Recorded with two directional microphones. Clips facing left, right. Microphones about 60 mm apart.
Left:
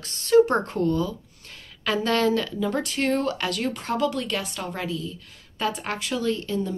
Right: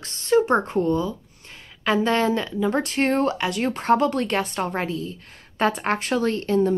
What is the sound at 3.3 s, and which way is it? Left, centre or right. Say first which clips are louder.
Speech: right 3 dB; centre.